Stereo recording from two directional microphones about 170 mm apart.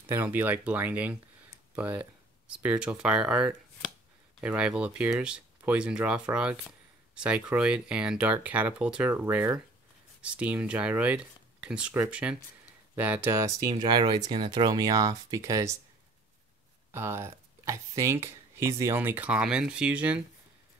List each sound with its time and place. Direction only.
0.0 s speech: 10° right (ahead or behind)
16.9 s speech: 15° right (ahead or behind)